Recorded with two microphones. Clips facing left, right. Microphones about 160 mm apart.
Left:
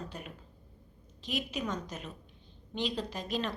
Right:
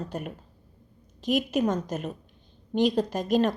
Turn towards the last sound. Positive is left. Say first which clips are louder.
# right 11 dB
turn(degrees=-45)  # may be behind; listen again after turning